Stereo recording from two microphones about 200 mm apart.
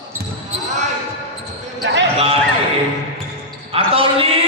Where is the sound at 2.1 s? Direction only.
30° right (ahead or behind).